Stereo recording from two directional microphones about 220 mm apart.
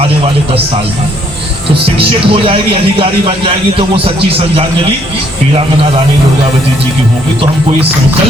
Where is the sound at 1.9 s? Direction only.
25° right (ahead or behind).